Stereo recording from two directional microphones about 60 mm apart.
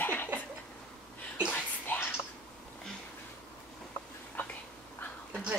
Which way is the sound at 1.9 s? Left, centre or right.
Left.